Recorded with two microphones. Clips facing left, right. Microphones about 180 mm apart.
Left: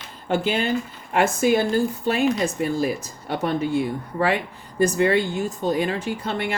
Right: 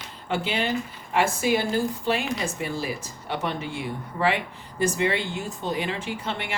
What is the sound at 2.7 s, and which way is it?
Speech, 45° left (ahead or behind).